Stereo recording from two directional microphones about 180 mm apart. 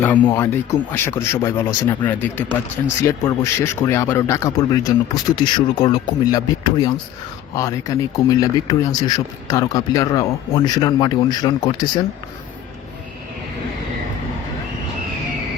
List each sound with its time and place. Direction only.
0.0 s speech: 15° left (ahead or behind)